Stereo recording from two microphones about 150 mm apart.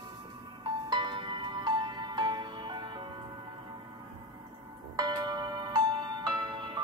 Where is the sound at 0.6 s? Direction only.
30° right (ahead or behind).